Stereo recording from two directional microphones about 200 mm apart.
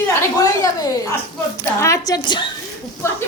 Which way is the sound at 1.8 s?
15° left (ahead or behind).